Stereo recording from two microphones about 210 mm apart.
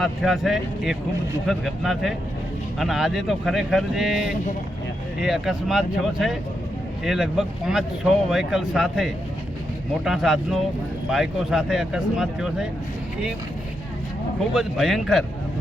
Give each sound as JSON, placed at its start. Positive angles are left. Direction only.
{"t": 0.0, "sound": "speech", "side_deg": 0}
{"t": 14.5, "sound": "speech", "side_deg": 0}